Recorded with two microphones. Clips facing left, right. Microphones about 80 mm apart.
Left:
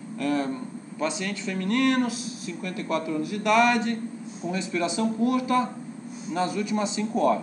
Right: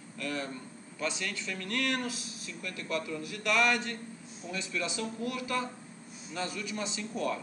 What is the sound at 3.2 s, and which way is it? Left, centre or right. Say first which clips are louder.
Speech: left 8 dB; centre.